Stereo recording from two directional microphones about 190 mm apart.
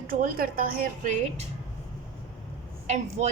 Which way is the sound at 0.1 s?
50° right (ahead or behind).